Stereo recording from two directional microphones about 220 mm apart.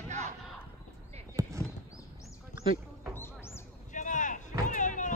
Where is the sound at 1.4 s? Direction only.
15° right (ahead or behind).